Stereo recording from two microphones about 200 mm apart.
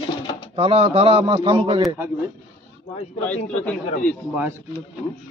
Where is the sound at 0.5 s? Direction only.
30° right (ahead or behind).